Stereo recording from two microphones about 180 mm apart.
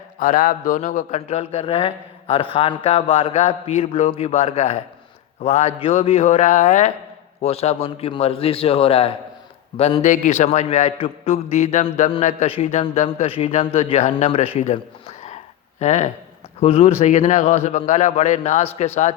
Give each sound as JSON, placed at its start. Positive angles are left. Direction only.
{"t": 0.2, "sound": "a man's voice", "side_deg": 45}